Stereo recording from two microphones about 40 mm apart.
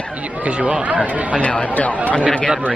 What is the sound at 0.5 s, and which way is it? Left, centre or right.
Speech, right.